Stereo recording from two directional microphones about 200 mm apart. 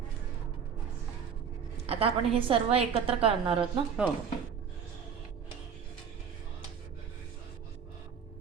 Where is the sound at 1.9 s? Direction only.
30° right (ahead or behind).